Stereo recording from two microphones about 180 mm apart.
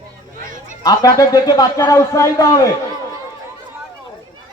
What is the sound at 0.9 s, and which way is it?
A man's voice, 20° left (ahead or behind).